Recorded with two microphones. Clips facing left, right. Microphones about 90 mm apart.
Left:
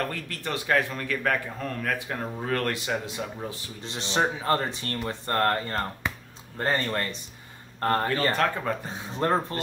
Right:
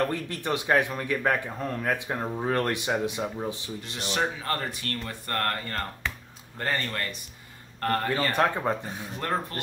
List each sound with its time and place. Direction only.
0.0 s speech: 20° right (ahead or behind)
3.8 s speech: 25° left (ahead or behind)
8.4 s speech: 20° right (ahead or behind)
8.8 s speech: 25° left (ahead or behind)